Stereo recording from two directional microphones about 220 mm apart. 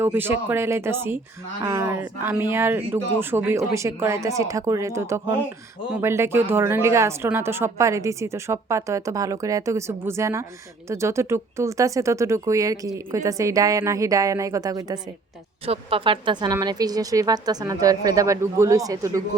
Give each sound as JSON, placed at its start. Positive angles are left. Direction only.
{"t": 0.0, "sound": "a woman's voice", "side_deg": -10}